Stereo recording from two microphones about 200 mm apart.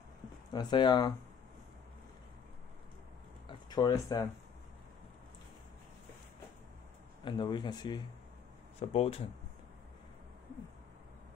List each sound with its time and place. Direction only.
0.5 s speech: 20° left (ahead or behind)
3.4 s a sound: 20° left (ahead or behind)
7.2 s speech: 20° left (ahead or behind)
8.7 s speech: 30° left (ahead or behind)